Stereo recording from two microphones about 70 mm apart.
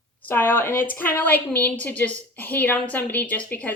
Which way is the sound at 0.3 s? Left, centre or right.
Left.